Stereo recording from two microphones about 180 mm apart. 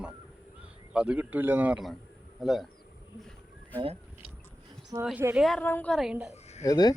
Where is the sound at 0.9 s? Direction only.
5° right (ahead or behind).